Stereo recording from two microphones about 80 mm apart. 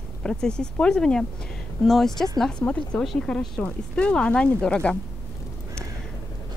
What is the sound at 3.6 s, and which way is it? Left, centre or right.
Speech, centre.